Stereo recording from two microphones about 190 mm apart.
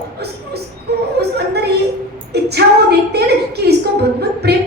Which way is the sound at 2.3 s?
60° right (ahead or behind).